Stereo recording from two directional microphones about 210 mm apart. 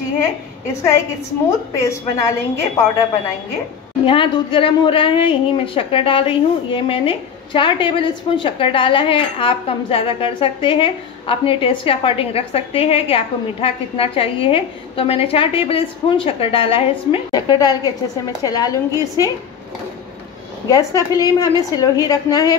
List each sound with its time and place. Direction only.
1.8 s a woman's voice: 15° left (ahead or behind)
20.6 s a woman's voice: 15° left (ahead or behind)